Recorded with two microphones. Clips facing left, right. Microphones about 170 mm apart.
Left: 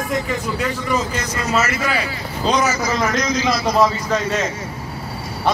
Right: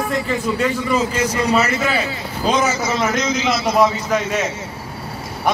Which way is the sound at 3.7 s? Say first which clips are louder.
Right 2 dB; 10° right (ahead or behind).